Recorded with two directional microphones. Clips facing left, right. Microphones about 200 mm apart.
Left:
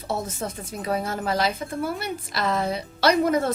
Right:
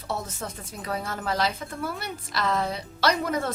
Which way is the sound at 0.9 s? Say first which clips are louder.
Left 5 dB; 25° left (ahead or behind).